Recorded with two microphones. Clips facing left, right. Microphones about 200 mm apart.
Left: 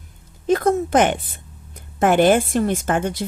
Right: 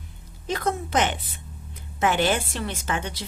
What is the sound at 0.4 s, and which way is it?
A woman's voice, 50° left (ahead or behind).